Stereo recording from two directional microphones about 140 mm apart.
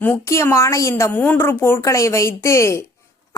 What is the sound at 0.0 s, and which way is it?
A woman's voice, 15° left (ahead or behind).